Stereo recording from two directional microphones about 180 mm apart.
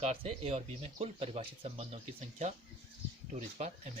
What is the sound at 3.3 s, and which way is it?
Speech, 35° right (ahead or behind).